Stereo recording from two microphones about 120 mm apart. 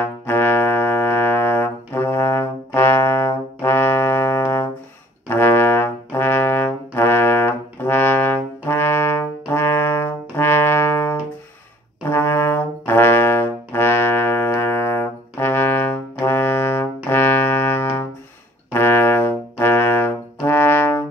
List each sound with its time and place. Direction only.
0.0 s brass instrument: 15° left (ahead or behind)